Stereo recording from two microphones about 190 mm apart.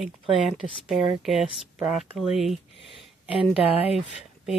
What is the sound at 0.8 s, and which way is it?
Speech, centre (ahead or behind).